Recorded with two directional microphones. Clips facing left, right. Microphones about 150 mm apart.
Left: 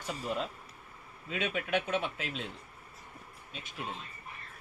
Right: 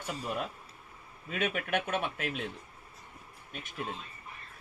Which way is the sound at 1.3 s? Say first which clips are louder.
Right 1 dB; 50° right (ahead or behind).